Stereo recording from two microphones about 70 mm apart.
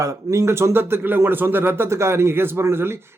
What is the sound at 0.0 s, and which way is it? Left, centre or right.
Speech, right.